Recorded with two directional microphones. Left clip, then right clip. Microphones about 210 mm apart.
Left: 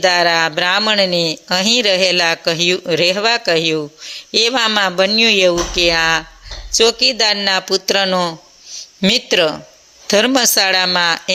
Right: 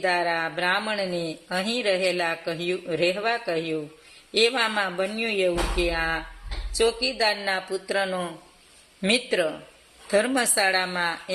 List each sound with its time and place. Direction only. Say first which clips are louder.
0.0 s speech: left 11 dB; 40° left (ahead or behind)